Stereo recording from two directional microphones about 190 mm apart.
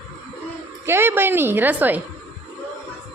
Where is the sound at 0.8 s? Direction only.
10° right (ahead or behind).